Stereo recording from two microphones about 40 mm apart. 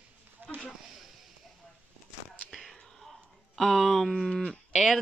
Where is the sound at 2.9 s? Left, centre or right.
Centre.